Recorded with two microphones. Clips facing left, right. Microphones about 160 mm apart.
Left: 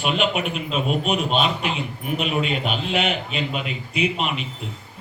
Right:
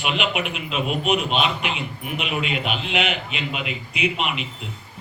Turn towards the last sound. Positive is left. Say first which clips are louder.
# left 1 dB
turn(degrees=40)  # may be behind; listen again after turning